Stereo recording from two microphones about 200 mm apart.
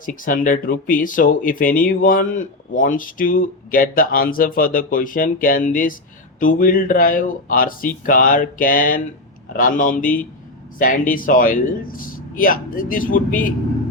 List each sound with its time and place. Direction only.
0.0 s speech: 45° left (ahead or behind)